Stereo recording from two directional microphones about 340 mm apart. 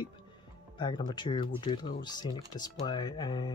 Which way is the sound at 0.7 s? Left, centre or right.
Centre.